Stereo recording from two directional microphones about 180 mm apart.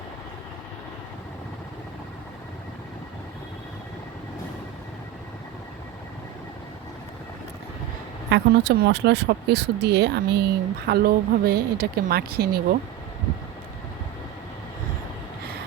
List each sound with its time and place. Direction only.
8.3 s speech: 70° right (ahead or behind)